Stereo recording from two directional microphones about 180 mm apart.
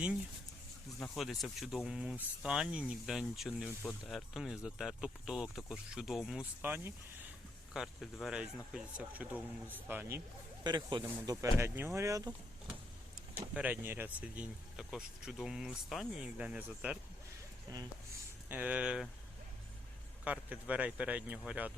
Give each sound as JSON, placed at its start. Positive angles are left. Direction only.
{"t": 0.9, "sound": "speech", "side_deg": 5}
{"t": 10.6, "sound": "speech", "side_deg": -25}
{"t": 13.3, "sound": "speech", "side_deg": -10}
{"t": 17.7, "sound": "speech", "side_deg": -20}
{"t": 18.4, "sound": "speech", "side_deg": -10}
{"t": 20.2, "sound": "speech", "side_deg": -5}